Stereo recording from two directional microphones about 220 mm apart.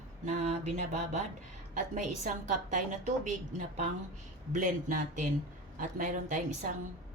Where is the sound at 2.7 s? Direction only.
35° right (ahead or behind).